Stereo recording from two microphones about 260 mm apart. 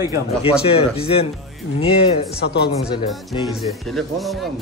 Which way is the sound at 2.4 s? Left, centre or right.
Left.